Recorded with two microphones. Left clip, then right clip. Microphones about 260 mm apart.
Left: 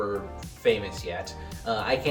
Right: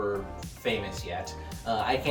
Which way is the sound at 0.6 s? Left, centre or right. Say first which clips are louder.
Left 6 dB; centre.